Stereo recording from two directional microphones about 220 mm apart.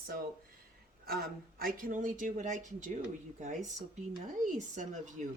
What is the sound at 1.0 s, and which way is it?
Speech, 40° right (ahead or behind).